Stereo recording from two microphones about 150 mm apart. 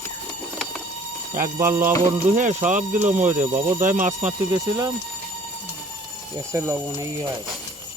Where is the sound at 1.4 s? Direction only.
15° right (ahead or behind).